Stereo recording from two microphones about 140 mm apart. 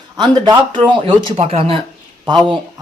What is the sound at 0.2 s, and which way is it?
Speech, 35° right (ahead or behind).